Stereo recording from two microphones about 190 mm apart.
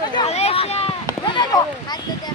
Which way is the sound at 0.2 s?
35° left (ahead or behind).